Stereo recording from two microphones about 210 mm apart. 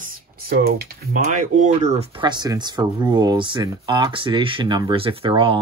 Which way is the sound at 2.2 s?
20° right (ahead or behind).